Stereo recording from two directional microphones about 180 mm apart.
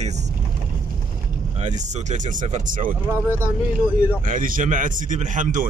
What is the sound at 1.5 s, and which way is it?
Speech, 40° right (ahead or behind).